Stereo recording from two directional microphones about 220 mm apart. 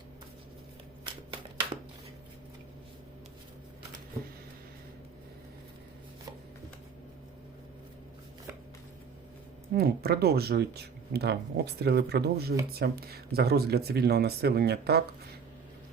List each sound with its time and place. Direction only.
9.7 s speech: 45° right (ahead or behind)